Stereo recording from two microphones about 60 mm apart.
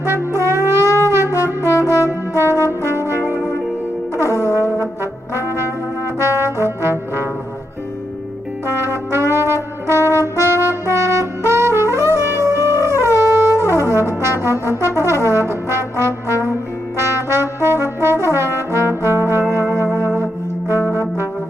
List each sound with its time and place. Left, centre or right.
0.0 s wind instrument: right
0.8 s wind instrument: left
1.9 s brass instrument: right
4.2 s brass instrument: right
6.1 s brass instrument: right
8.6 s brass instrument: right
14.4 s trombone: right
20.2 s music: right
20.8 s music: left